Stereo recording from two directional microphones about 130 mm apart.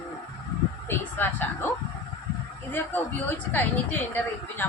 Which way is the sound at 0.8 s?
15° left (ahead or behind).